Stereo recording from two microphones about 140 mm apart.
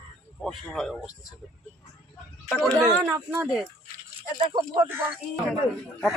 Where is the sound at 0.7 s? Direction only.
5° left (ahead or behind).